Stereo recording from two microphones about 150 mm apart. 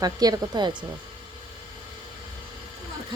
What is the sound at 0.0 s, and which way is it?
Speech, 25° right (ahead or behind).